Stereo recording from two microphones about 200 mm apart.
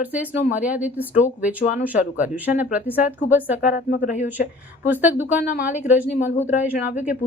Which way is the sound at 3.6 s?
45° left (ahead or behind).